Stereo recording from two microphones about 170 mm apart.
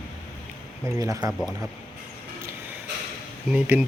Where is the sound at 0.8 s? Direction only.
15° right (ahead or behind).